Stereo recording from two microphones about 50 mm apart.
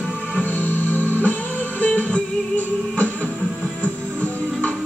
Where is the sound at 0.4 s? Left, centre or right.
Left.